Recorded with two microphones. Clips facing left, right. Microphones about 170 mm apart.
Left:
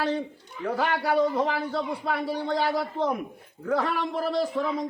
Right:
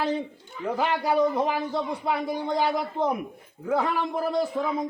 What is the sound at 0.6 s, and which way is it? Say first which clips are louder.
A man's voice: even; 20° right (ahead or behind).